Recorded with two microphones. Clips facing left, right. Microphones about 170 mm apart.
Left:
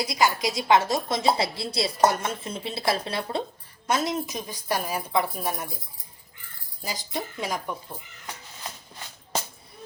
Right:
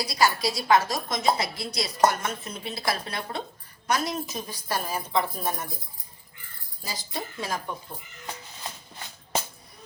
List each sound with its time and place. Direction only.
0.0 s a woman's voice: 20° left (ahead or behind)
6.8 s a woman's voice: 15° left (ahead or behind)